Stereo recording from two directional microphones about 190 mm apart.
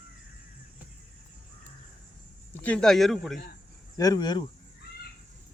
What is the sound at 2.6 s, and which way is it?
Speech, 5° left (ahead or behind).